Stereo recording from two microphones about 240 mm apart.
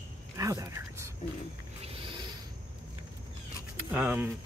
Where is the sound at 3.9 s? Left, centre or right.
Centre.